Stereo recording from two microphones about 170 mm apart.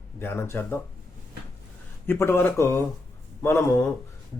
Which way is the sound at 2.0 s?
15° left (ahead or behind).